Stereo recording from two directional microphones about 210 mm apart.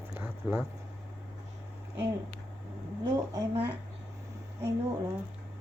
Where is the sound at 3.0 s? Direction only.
15° right (ahead or behind).